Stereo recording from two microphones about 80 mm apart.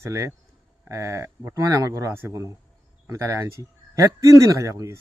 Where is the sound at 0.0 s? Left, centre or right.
Right.